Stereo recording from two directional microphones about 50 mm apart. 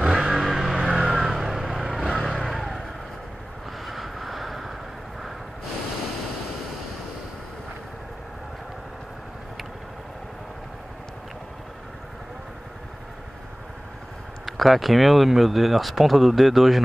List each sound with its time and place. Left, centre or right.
0.0 s vehicle: centre
0.4 s music: centre
0.8 s vehicle: centre
3.8 s vehicle: centre
14.4 s speech: centre